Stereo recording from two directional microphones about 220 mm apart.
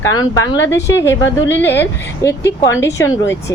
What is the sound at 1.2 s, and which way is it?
Speech, 60° left (ahead or behind).